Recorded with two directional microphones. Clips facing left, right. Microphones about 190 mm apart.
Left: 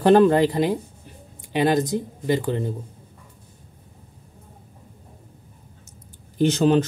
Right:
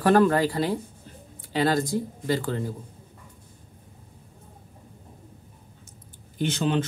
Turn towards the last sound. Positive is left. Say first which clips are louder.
# left 7 dB
turn(degrees=40)  # may be behind; listen again after turning